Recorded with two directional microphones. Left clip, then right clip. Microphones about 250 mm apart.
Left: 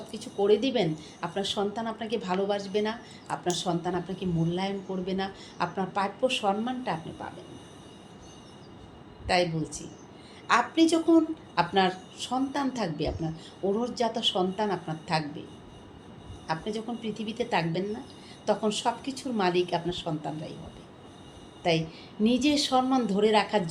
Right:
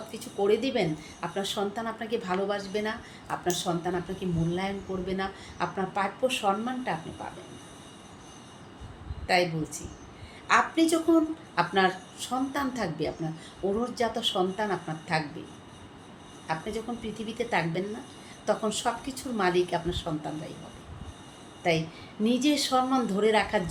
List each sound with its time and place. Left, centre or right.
0.1 s a woman's voice: centre
9.2 s a woman's voice: centre
16.5 s a woman's voice: centre
21.6 s a woman's voice: centre